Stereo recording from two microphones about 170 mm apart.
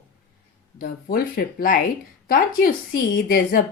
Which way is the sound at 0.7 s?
60° left (ahead or behind).